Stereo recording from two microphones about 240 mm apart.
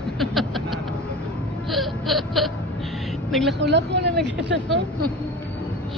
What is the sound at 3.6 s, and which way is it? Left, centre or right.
A woman's voice, right.